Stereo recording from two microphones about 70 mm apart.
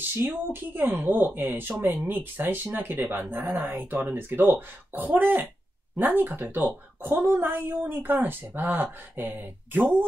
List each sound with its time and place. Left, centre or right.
0.2 s speech: right